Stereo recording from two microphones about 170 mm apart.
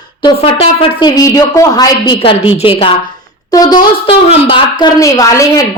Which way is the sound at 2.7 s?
35° left (ahead or behind).